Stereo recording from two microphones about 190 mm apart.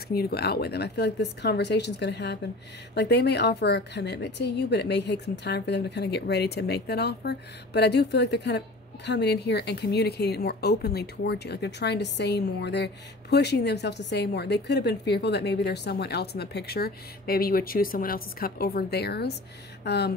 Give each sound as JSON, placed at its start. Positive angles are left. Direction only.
{"t": 0.1, "sound": "a woman's voice", "side_deg": 55}